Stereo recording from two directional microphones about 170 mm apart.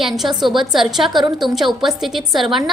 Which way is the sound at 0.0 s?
Centre (ahead or behind).